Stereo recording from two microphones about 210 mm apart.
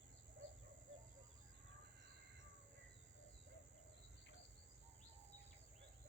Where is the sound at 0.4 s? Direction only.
50° right (ahead or behind).